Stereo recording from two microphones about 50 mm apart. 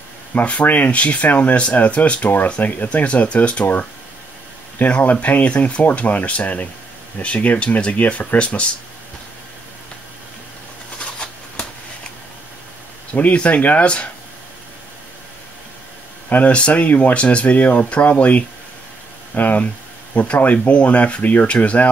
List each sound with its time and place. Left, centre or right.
0.3 s speech: left
4.7 s speech: left
11.0 s a sound: centre
13.1 s speech: left
16.3 s speech: left